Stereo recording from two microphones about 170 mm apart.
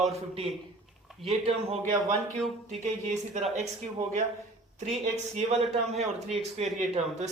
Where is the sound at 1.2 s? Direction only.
35° right (ahead or behind).